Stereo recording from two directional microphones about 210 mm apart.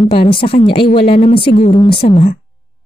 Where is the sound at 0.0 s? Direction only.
25° left (ahead or behind).